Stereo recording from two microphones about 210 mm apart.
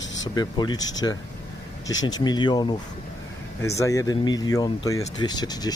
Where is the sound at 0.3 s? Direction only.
20° left (ahead or behind).